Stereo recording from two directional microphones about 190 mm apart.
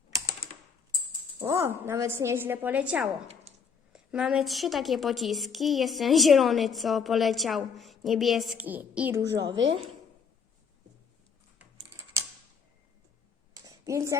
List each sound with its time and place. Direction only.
0.4 s typing: 50° left (ahead or behind)
1.4 s a woman's voice: 15° right (ahead or behind)
9.3 s a woman's voice: 70° right (ahead or behind)
13.7 s a sound: 15° right (ahead or behind)